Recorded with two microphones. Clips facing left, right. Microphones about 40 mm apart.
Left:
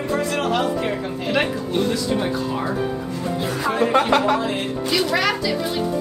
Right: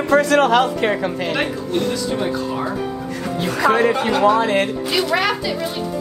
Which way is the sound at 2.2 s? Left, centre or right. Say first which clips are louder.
Right 1 dB; centre.